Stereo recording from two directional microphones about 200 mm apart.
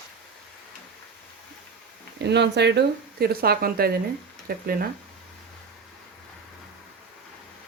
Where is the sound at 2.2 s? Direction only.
60° right (ahead or behind).